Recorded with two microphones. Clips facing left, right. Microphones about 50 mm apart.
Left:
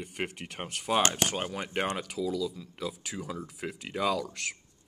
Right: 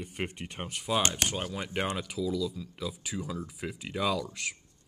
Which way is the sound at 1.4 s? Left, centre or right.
Left.